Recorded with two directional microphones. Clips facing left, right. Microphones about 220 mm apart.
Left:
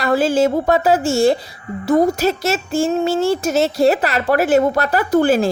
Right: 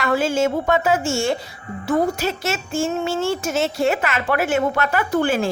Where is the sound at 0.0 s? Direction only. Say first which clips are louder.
Left 4 dB; 35° left (ahead or behind).